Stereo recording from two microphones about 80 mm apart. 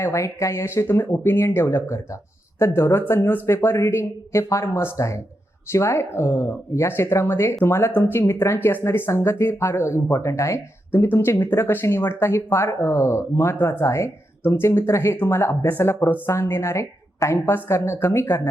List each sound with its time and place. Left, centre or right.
0.0 s speech: left